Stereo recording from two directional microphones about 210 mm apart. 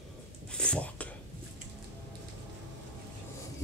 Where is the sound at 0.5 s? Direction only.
5° left (ahead or behind).